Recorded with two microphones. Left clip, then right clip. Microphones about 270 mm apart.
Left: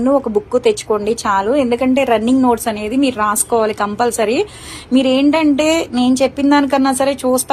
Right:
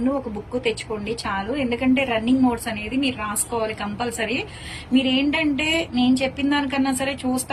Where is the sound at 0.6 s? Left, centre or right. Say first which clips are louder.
Left 11 dB; centre.